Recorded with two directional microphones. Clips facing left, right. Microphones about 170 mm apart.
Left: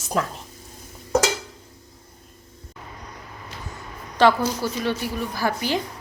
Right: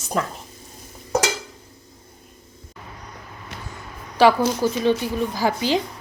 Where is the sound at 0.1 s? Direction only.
Centre (ahead or behind).